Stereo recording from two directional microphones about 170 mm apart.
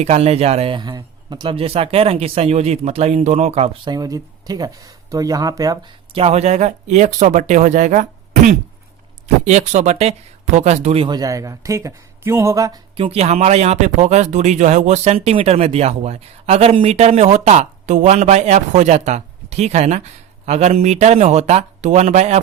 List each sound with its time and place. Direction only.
0.0 s speech: 40° right (ahead or behind); by 5.8 s 20° right (ahead or behind)
6.1 s speech: 40° right (ahead or behind)
11.2 s speech: 20° right (ahead or behind)
13.0 s speech: 35° right (ahead or behind)